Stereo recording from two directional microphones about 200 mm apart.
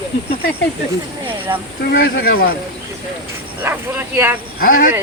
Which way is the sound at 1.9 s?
50° left (ahead or behind).